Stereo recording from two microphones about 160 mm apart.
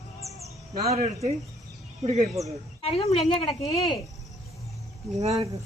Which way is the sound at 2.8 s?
40° left (ahead or behind).